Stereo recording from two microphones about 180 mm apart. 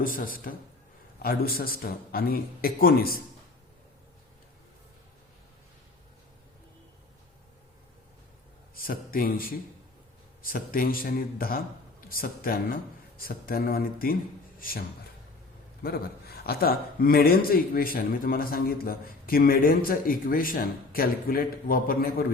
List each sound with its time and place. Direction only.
0.0 s a man's voice: 50° left (ahead or behind)
8.7 s a man's voice: 55° left (ahead or behind)